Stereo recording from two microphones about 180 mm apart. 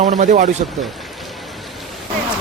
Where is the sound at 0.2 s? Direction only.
40° right (ahead or behind).